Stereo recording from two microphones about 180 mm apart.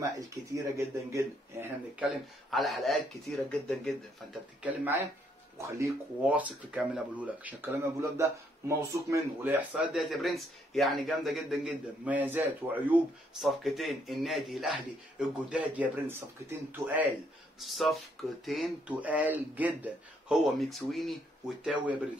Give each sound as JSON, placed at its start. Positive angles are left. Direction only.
{"t": 0.0, "sound": "speech", "side_deg": -15}
{"t": 2.0, "sound": "speech", "side_deg": 0}
{"t": 4.6, "sound": "speech", "side_deg": -10}